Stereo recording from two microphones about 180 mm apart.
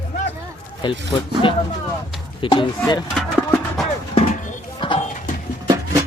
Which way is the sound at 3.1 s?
Centre (ahead or behind).